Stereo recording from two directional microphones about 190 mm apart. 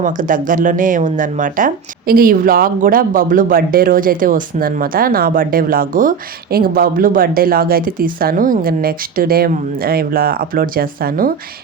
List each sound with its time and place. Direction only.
0.0 s speech: 45° right (ahead or behind)